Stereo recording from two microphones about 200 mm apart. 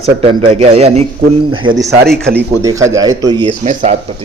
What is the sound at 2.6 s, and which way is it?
Speech, 15° right (ahead or behind).